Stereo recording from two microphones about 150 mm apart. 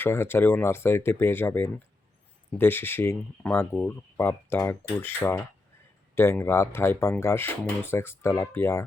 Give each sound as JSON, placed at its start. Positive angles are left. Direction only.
{"t": 0.0, "sound": "speech", "side_deg": 15}